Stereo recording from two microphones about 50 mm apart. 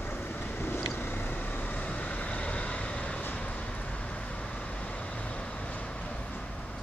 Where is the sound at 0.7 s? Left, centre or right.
Left.